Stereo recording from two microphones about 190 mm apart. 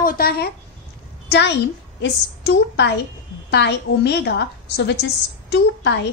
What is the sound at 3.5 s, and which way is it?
A woman's voice, 65° left (ahead or behind).